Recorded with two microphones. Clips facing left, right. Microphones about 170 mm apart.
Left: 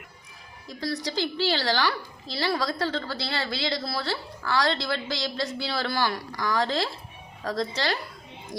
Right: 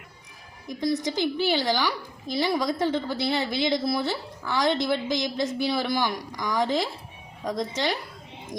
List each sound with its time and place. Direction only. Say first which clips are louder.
0.7 s a woman's voice: right 4 dB; 20° right (ahead or behind)